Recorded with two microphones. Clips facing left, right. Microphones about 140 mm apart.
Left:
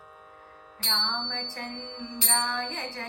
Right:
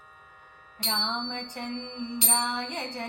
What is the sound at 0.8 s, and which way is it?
Music, 15° right (ahead or behind).